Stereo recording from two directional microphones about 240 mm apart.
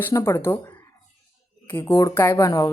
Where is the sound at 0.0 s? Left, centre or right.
Centre.